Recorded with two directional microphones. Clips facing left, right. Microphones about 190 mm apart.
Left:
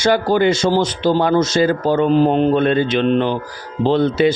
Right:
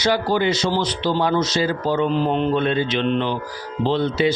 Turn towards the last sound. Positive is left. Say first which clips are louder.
# left 5 dB
turn(degrees=50)  # may be behind; listen again after turning